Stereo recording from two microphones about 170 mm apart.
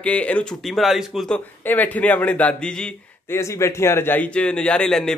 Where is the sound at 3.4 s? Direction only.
15° left (ahead or behind).